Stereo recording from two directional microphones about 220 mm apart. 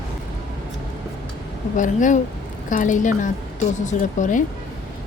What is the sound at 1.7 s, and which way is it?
Frying, 35° left (ahead or behind).